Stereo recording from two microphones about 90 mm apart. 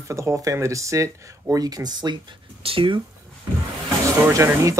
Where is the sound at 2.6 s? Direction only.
80° right.